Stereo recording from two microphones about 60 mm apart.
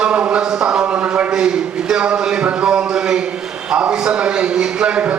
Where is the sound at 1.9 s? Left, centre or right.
Centre.